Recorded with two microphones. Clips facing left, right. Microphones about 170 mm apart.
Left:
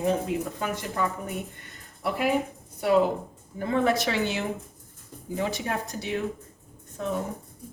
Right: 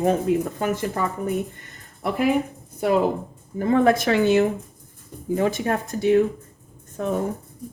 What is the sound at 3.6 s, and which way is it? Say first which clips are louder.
A woman's voice: right 6 dB; 50° right (ahead or behind).